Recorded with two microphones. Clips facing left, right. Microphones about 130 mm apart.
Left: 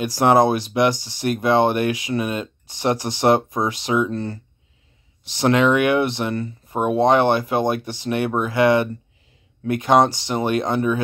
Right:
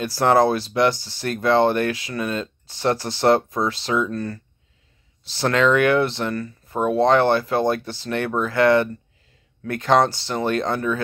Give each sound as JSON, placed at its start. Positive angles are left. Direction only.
{"t": 0.0, "sound": "speech", "side_deg": 15}